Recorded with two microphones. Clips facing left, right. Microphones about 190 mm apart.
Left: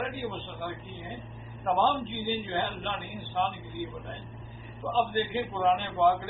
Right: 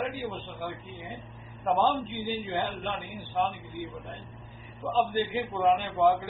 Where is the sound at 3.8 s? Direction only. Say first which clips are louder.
Left 2 dB; 5° right (ahead or behind).